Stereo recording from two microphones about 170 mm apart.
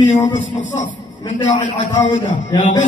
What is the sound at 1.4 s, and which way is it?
A man's voice, 30° left (ahead or behind).